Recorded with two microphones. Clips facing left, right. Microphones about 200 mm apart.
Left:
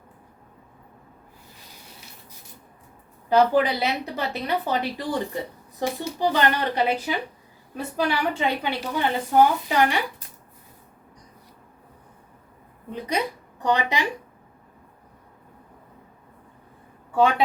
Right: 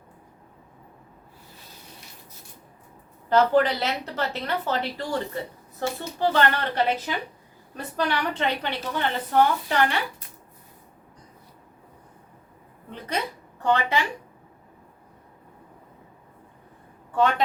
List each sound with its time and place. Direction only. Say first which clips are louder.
3.2 s a woman's voice: left 1 dB; 10° left (ahead or behind)
12.9 s a sound: left 3 dB; 15° left (ahead or behind)
17.2 s a woman's voice: left 2 dB; 10° left (ahead or behind)